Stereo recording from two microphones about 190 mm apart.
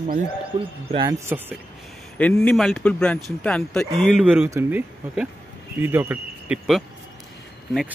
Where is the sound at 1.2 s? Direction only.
10° right (ahead or behind).